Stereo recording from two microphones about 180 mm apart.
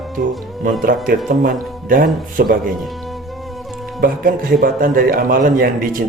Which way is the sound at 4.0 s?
55° right (ahead or behind).